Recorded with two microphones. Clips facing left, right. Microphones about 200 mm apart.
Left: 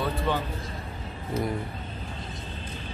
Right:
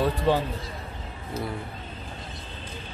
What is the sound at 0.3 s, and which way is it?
Speech, 30° right (ahead or behind).